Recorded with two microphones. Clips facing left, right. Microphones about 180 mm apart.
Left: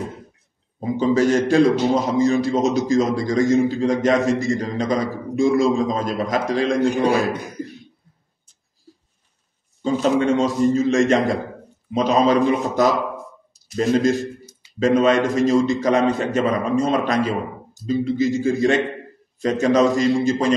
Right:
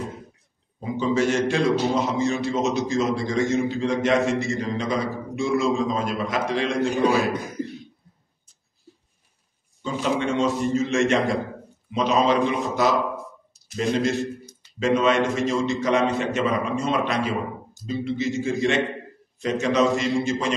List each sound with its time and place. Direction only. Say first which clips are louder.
0.7 s a man's voice: left 4 dB; 40° left (ahead or behind)
9.8 s a man's voice: left 6 dB; 40° left (ahead or behind)
13.9 s a man's voice: left 6 dB; 40° left (ahead or behind)